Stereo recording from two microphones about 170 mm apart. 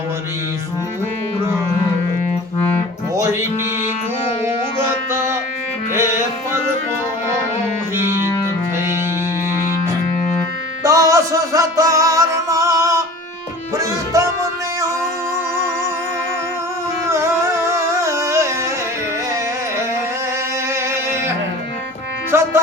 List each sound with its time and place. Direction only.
5.1 s music: 15° right (ahead or behind)
10.8 s music: 20° right (ahead or behind)
17.1 s music: 15° right (ahead or behind)
20.9 s music: 15° right (ahead or behind)